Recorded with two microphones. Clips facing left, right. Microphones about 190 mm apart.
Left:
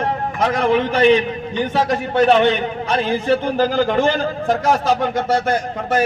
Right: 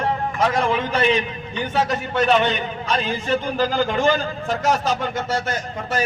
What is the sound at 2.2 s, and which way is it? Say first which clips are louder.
A man's voice: left 5 dB; 60° left (ahead or behind).